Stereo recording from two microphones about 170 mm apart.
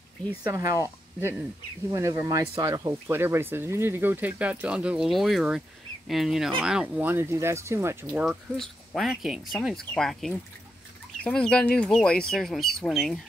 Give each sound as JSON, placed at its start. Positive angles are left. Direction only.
{"t": 0.4, "sound": "speech", "side_deg": -20}